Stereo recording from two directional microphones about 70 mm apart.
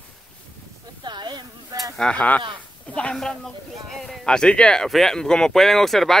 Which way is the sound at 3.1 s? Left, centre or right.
Centre.